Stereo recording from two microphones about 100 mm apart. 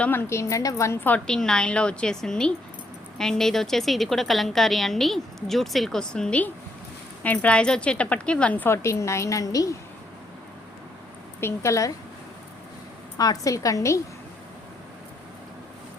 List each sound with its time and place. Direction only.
0.0 s a woman's voice: 20° left (ahead or behind)
1.0 s a woman's voice: 10° left (ahead or behind); by 9.7 s 35° left (ahead or behind)
11.3 s a woman's voice: 25° left (ahead or behind)
13.1 s a woman's voice: 40° left (ahead or behind)